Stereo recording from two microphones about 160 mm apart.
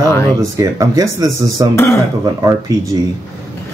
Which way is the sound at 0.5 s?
20° right (ahead or behind).